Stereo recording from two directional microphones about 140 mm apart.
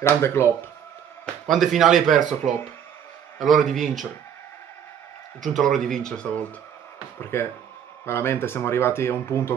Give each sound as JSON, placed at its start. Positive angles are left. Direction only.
{"t": 0.0, "sound": "speech", "side_deg": 20}
{"t": 1.2, "sound": "speech", "side_deg": 0}
{"t": 5.5, "sound": "speech", "side_deg": 0}
{"t": 7.2, "sound": "speech", "side_deg": 15}